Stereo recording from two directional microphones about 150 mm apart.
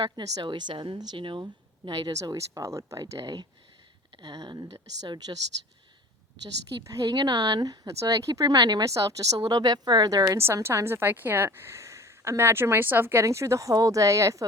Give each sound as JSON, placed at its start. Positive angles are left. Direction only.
{"t": 0.0, "sound": "speech", "side_deg": -30}
{"t": 6.8, "sound": "speech", "side_deg": -25}